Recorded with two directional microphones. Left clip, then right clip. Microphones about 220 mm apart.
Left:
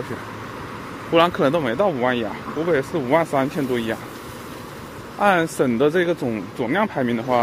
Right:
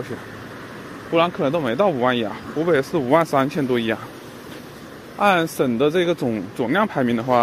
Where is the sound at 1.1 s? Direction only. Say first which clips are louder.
Left 2 dB; centre (ahead or behind).